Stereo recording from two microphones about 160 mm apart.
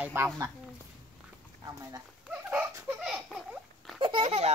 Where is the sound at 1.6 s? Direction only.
20° right (ahead or behind).